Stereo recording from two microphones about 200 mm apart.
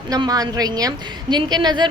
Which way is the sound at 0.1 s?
20° right (ahead or behind).